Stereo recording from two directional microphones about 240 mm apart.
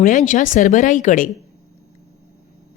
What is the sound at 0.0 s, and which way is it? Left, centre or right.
Speech, left.